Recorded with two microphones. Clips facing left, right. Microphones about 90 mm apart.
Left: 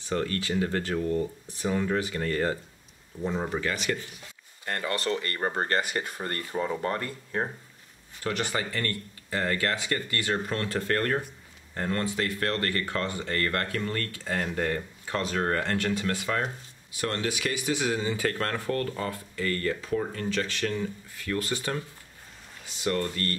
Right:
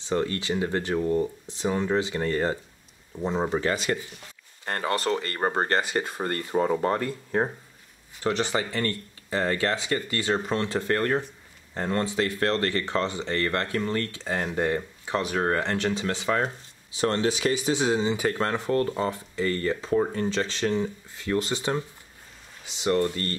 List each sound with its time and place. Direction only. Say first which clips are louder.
0.0 s speech: right 3 dB; 20° right (ahead or behind)